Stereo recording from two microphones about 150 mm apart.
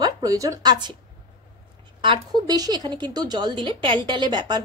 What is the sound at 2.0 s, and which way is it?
A woman's voice, 30° right (ahead or behind).